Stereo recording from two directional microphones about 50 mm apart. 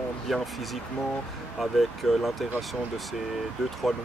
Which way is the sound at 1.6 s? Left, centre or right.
Centre.